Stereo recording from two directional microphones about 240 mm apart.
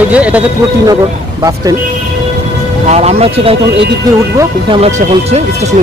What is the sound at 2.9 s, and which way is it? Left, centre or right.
Speech, right.